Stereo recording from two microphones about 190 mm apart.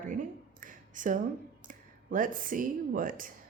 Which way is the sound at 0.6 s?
45° right (ahead or behind).